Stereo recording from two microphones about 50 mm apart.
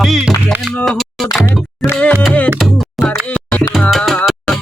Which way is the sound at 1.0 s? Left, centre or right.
Centre.